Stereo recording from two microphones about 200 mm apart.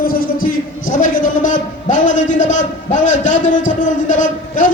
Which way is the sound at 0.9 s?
40° left (ahead or behind).